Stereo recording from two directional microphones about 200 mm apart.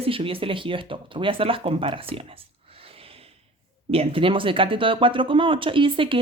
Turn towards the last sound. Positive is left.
turn(degrees=-25)  # may be behind; listen again after turning